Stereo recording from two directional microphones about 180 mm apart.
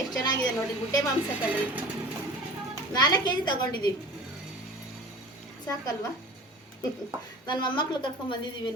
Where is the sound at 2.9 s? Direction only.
25° left (ahead or behind).